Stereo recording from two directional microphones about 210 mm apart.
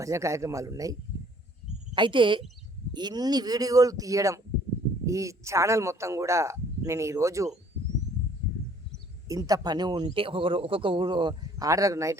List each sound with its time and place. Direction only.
0.0 s speech: 15° right (ahead or behind)
2.0 s a man's voice: 25° right (ahead or behind)
9.3 s a man's voice: 15° right (ahead or behind)